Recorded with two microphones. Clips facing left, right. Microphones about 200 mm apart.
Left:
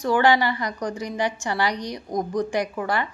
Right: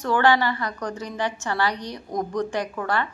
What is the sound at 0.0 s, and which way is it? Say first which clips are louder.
A woman's voice: left 1 dB; 10° left (ahead or behind).